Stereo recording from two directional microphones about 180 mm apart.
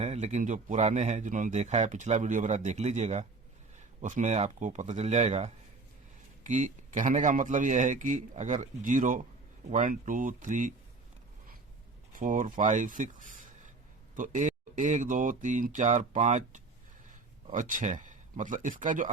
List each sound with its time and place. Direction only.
0.0 s a man's voice: 40° right (ahead or behind)
12.1 s a man's voice: 45° right (ahead or behind)